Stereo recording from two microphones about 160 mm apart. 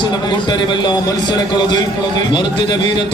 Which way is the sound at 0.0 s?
30° left (ahead or behind).